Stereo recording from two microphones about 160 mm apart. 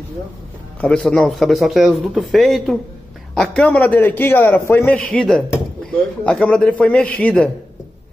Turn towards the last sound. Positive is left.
turn(degrees=5)  # may be behind; listen again after turning